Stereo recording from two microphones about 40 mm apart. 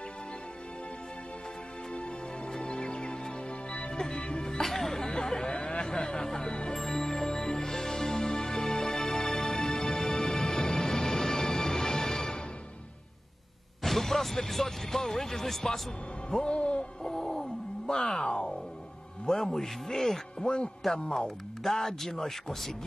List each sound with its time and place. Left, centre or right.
2.7 s music: left
3.9 s speech: centre
6.8 s music: centre
13.8 s speech: centre
16.3 s music: left
17.0 s music: centre
19.2 s speech: centre
20.4 s speech: left